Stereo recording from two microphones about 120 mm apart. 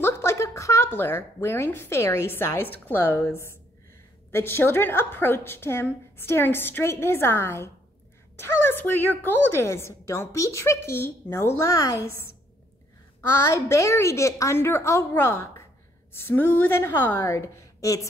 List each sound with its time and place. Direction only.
0.0 s a woman's voice: 20° left (ahead or behind)
13.3 s a woman's voice: 25° left (ahead or behind)